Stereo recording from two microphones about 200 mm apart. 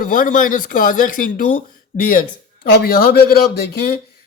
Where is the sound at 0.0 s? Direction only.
45° left (ahead or behind).